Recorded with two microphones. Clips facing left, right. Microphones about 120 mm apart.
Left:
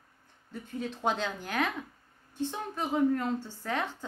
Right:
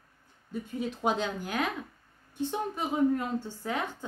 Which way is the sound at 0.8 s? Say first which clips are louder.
Right 1 dB; 10° right (ahead or behind).